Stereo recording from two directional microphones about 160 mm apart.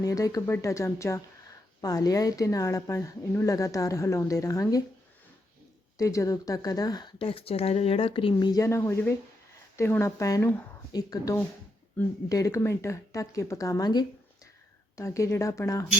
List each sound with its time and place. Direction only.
0.0 s speech: 20° left (ahead or behind)
6.0 s speech: 20° left (ahead or behind)